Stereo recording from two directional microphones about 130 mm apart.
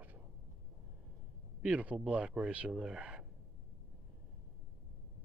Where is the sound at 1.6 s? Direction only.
10° right (ahead or behind).